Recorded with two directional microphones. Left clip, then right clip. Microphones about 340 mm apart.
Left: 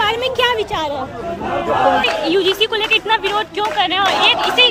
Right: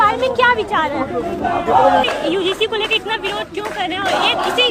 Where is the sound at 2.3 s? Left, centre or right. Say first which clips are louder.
Left 2 dB; centre.